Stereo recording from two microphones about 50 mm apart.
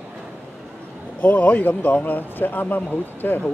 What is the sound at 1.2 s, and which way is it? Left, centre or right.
Speech, left.